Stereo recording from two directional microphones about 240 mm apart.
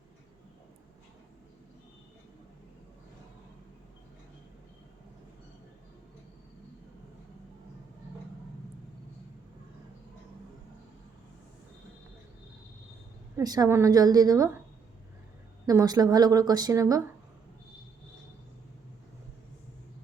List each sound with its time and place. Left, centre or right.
13.3 s a woman's voice: centre
15.6 s a woman's voice: centre